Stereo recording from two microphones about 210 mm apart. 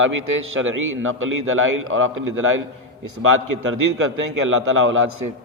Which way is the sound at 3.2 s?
85° right.